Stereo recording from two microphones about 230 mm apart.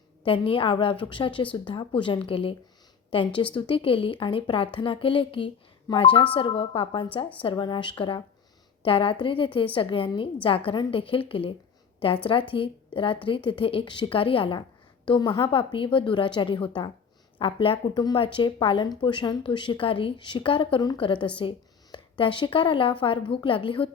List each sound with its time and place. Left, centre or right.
0.3 s a woman's voice: left